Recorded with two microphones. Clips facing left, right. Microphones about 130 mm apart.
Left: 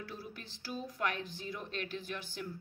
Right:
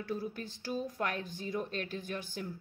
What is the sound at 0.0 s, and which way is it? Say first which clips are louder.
Speech: right 8 dB; 45° right (ahead or behind).